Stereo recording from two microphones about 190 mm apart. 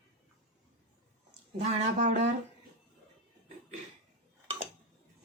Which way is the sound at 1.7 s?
40° right (ahead or behind).